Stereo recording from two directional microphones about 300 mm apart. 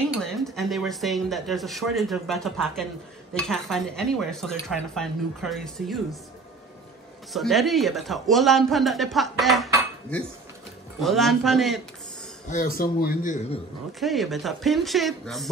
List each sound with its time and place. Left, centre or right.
0.1 s speech: centre
7.3 s speech: centre
11.0 s speech: centre
12.4 s speech: left
13.9 s speech: centre